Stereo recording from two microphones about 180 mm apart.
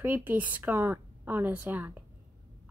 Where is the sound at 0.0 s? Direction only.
10° right (ahead or behind).